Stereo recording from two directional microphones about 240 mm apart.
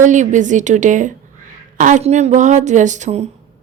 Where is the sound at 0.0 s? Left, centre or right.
Right.